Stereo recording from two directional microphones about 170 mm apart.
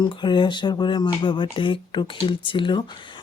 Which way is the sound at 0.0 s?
25° left (ahead or behind).